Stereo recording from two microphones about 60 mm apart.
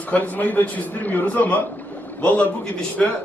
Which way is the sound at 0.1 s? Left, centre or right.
Left.